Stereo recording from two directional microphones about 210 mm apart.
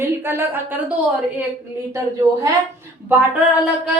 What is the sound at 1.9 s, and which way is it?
Speech, 15° right (ahead or behind).